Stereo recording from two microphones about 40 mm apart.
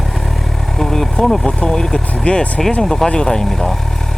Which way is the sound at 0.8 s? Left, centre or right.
Centre.